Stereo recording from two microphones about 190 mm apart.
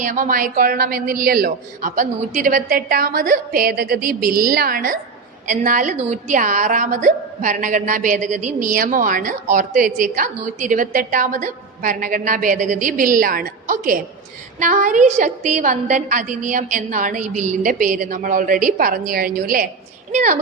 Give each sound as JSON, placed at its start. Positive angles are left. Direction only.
{"t": 0.0, "sound": "a woman's voice", "side_deg": -45}